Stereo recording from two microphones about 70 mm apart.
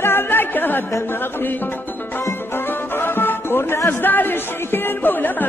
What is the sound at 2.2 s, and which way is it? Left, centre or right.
Music, left.